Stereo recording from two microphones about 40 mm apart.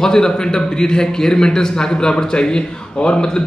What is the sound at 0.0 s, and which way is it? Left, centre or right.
A man's voice, centre.